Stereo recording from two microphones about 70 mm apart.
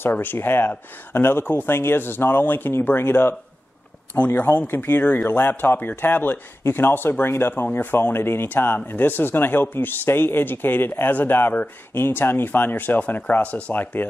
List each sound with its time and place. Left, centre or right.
0.0 s speech: left